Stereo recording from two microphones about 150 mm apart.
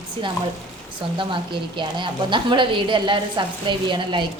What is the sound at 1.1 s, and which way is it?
A woman's voice, 35° right (ahead or behind).